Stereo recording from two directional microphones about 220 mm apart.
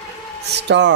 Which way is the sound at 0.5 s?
50° right (ahead or behind).